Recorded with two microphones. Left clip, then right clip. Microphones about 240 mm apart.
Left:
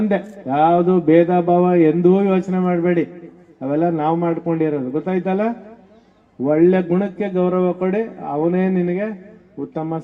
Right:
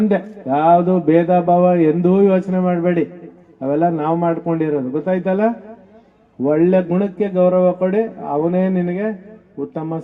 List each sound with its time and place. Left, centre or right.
0.1 s a man's voice: right